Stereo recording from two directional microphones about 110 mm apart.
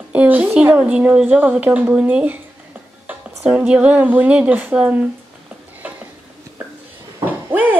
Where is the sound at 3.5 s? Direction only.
10° right (ahead or behind).